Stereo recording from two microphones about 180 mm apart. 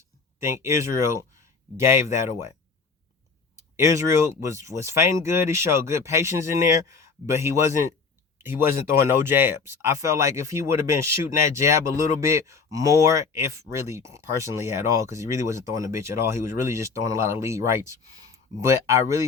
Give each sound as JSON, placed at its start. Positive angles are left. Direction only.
{"t": 0.3, "sound": "speech", "side_deg": -15}
{"t": 3.8, "sound": "speech", "side_deg": -15}